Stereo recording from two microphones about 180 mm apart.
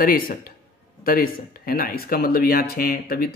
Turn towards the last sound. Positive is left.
turn(degrees=55)  # may be behind; listen again after turning